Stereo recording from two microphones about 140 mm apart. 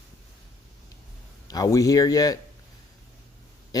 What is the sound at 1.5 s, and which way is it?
Speech, 25° left (ahead or behind).